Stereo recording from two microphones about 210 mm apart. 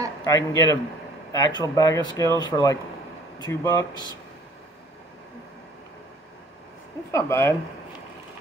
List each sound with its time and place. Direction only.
0.2 s speech: 15° left (ahead or behind)
7.1 s speech: 15° left (ahead or behind)